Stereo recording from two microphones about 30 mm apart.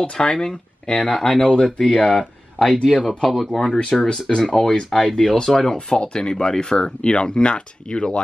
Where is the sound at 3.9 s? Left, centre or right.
Centre.